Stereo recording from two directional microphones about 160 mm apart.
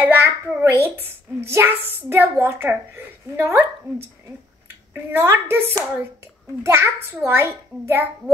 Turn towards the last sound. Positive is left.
turn(degrees=-15)  # may be behind; listen again after turning